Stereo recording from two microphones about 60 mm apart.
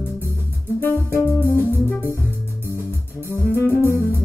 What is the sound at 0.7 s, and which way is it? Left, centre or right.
Music, left.